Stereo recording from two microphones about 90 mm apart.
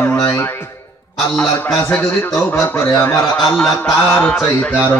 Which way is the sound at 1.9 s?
20° left (ahead or behind).